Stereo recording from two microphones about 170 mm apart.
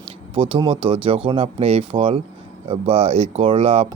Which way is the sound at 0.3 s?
30° right (ahead or behind).